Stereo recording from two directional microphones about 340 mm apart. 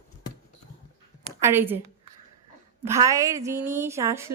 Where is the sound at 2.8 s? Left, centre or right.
Centre.